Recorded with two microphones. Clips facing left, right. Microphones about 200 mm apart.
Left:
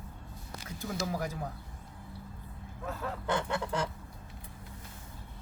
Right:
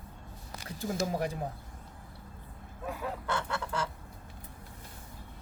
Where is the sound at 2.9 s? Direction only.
10° right (ahead or behind).